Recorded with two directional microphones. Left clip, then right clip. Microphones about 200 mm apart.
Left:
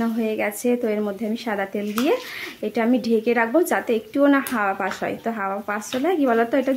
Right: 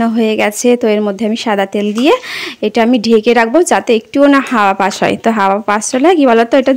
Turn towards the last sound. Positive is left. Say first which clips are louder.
# right 11 dB
turn(degrees=-40)  # may be behind; listen again after turning